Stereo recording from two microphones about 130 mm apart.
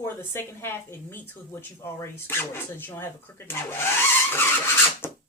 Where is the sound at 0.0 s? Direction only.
20° left (ahead or behind).